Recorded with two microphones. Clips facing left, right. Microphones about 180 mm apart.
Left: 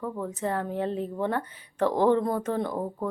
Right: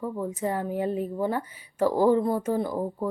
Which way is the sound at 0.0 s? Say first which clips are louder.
Right 2 dB; 10° right (ahead or behind).